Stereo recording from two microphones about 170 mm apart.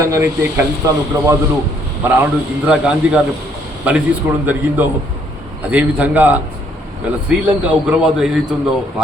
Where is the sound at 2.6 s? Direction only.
5° right (ahead or behind).